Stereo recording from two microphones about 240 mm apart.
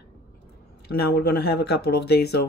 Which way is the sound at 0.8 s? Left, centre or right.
Left.